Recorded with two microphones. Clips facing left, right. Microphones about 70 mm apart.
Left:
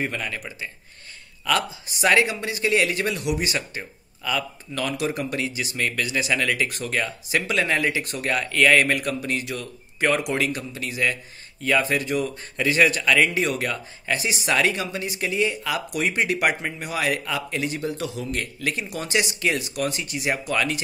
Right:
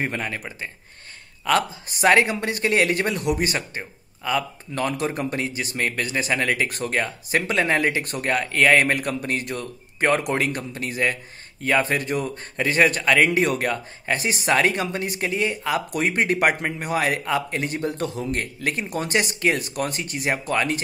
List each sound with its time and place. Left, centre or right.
0.0 s speech: right